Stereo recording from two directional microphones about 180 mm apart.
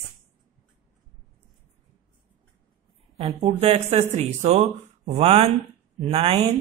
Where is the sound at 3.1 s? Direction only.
35° right (ahead or behind).